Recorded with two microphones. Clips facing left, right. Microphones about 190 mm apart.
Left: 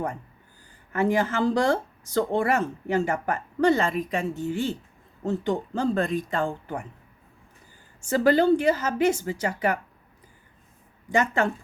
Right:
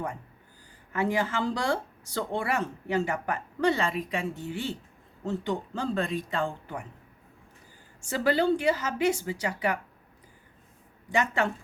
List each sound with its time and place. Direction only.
0.9 s a woman's voice: 50° left (ahead or behind)
8.0 s a woman's voice: 45° left (ahead or behind)
11.1 s a woman's voice: 45° left (ahead or behind)